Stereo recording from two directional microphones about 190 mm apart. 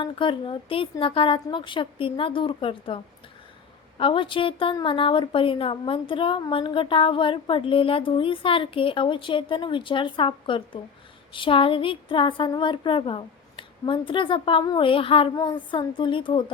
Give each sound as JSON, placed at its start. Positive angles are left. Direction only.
{"t": 0.0, "sound": "a woman's voice", "side_deg": 25}